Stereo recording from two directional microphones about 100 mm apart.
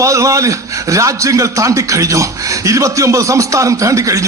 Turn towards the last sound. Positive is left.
turn(degrees=-30)  # may be behind; listen again after turning